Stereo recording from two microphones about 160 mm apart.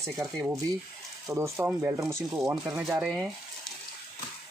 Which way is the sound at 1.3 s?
20° right (ahead or behind).